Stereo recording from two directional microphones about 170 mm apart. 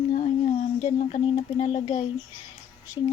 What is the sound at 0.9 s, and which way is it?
Speech, 45° left (ahead or behind).